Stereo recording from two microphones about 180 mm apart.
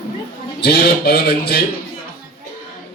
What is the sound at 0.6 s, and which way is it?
A man's voice, 60° left (ahead or behind).